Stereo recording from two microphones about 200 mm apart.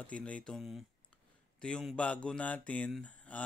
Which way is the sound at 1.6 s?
5° left (ahead or behind).